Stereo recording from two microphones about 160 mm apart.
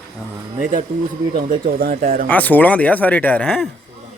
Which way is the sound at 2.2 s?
10° left (ahead or behind).